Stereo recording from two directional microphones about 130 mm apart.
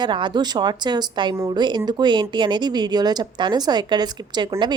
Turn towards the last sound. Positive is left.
turn(degrees=-35)  # may be behind; listen again after turning